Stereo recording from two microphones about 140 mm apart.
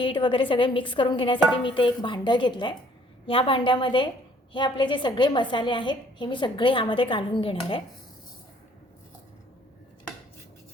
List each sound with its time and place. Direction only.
0.0 s a woman's voice: 35° left (ahead or behind)